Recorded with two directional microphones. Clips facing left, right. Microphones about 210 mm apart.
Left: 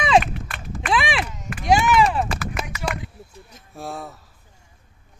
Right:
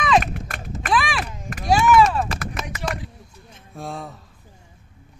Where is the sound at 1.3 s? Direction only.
50° right (ahead or behind).